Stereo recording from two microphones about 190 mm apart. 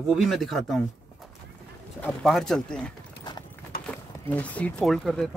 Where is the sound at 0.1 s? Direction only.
Centre (ahead or behind).